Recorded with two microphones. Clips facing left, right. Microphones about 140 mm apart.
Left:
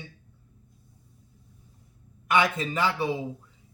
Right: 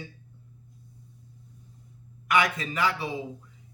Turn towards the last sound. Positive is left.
turn(degrees=30)  # may be behind; listen again after turning